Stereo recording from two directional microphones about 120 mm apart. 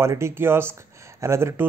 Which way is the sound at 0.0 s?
20° right (ahead or behind).